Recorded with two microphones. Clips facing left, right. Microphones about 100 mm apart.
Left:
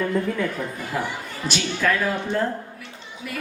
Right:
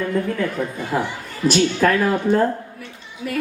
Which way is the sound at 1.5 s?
40° right (ahead or behind).